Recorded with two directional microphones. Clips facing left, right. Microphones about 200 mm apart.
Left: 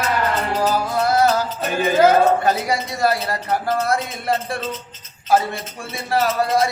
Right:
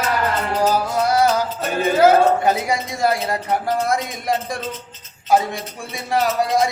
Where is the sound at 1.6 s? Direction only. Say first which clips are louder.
Even; centre (ahead or behind).